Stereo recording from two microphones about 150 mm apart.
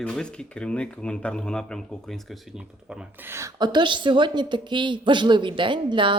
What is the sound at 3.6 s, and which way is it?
A woman's voice, 30° right (ahead or behind).